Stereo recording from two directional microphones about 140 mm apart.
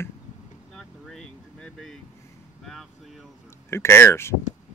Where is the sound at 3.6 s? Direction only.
20° left (ahead or behind).